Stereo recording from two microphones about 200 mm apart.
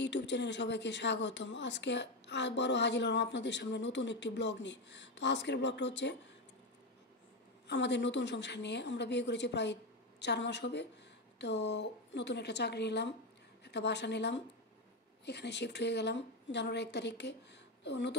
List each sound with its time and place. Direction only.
0.0 s speech: 60° left (ahead or behind)
7.6 s speech: 60° left (ahead or behind)